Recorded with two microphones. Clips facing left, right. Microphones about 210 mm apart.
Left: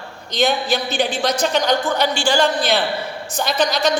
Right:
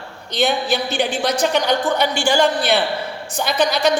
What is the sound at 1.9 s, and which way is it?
Speech, 55° right (ahead or behind).